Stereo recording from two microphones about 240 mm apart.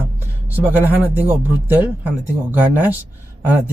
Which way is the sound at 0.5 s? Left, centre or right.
Centre.